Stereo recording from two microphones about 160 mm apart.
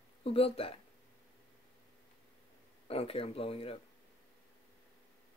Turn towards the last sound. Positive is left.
turn(degrees=35)  # may be behind; listen again after turning